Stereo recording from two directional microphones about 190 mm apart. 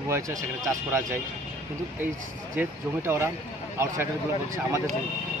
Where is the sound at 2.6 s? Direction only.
15° right (ahead or behind).